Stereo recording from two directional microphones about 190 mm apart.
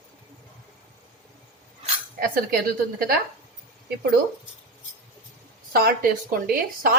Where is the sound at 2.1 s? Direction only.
50° right (ahead or behind).